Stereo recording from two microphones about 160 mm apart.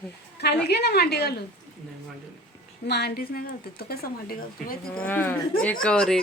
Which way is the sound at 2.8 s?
90° left.